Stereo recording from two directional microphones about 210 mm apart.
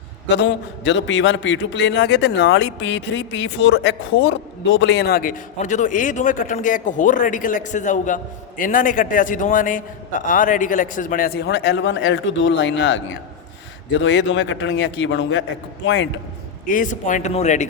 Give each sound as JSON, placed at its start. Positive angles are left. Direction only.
{"t": 0.3, "sound": "a man's voice", "side_deg": 60}
{"t": 5.5, "sound": "speech", "side_deg": 35}
{"t": 14.0, "sound": "a man's voice", "side_deg": 60}
{"t": 16.6, "sound": "speech", "side_deg": 40}